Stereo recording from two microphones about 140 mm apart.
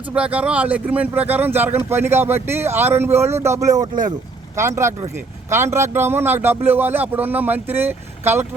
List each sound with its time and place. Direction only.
0.1 s a man's voice: 10° right (ahead or behind)